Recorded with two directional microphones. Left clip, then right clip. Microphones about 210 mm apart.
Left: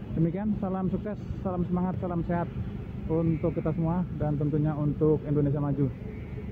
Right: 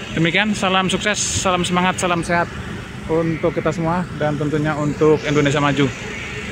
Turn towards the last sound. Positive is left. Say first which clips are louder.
# right 13 dB
turn(degrees=-20)  # may be behind; listen again after turning